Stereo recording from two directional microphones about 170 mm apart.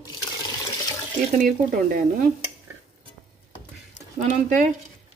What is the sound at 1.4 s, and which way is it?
Speech, 50° right (ahead or behind).